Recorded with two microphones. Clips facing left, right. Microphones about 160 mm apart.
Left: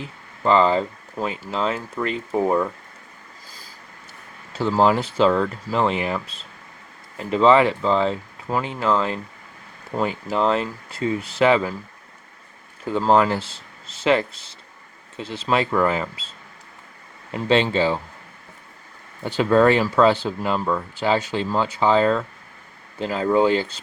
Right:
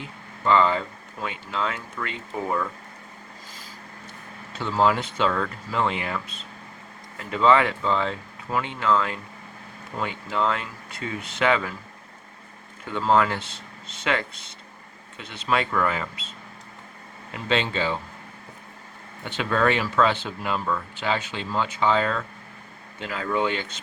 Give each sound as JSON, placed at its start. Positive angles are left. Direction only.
{"t": 0.0, "sound": "speech", "side_deg": 30}
{"t": 4.5, "sound": "speech", "side_deg": 35}
{"t": 12.8, "sound": "speech", "side_deg": 35}
{"t": 17.3, "sound": "speech", "side_deg": 35}
{"t": 19.2, "sound": "speech", "side_deg": 35}